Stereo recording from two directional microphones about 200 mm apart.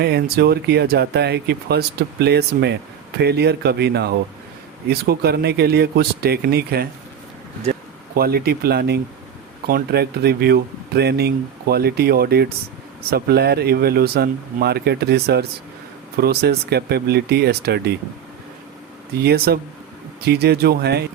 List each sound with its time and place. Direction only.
0.0 s speech: 50° right (ahead or behind)
8.1 s speech: 50° right (ahead or behind)
19.2 s speech: 55° right (ahead or behind)